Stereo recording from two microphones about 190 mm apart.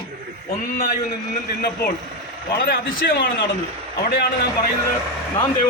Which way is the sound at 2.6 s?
55° left (ahead or behind).